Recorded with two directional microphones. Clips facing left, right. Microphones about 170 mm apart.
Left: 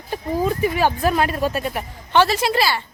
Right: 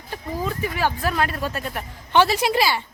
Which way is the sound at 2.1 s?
15° right (ahead or behind).